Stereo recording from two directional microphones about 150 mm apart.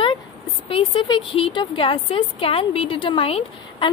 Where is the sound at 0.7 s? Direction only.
35° left (ahead or behind).